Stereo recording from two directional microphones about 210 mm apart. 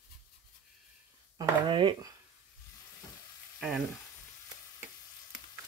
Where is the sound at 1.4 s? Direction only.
25° right (ahead or behind).